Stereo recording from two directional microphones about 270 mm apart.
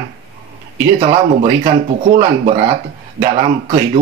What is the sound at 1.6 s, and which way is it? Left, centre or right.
Speech, centre.